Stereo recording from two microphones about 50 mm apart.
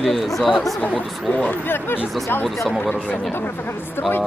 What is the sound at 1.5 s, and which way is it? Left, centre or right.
Speech, left.